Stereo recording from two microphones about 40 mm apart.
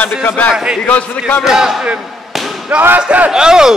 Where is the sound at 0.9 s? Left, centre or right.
Left.